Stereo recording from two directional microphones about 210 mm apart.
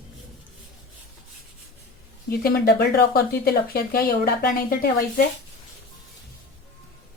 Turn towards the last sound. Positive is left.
turn(degrees=45)  # may be behind; listen again after turning